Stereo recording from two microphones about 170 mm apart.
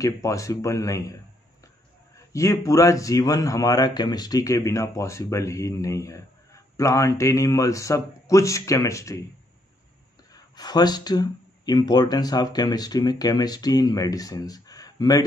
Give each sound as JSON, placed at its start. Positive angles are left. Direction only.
{"t": 0.0, "sound": "a man's voice", "side_deg": 20}
{"t": 2.3, "sound": "a man's voice", "side_deg": 20}
{"t": 10.3, "sound": "a man's voice", "side_deg": 25}